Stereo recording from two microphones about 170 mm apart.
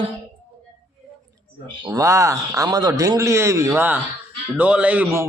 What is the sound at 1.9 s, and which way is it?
A man's voice, 20° right (ahead or behind).